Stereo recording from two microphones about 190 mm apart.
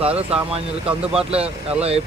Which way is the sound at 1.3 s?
30° right (ahead or behind).